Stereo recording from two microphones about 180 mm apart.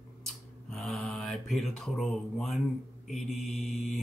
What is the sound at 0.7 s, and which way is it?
Speech, centre (ahead or behind).